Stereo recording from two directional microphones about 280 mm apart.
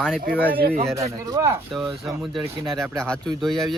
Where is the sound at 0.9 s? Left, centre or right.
Centre.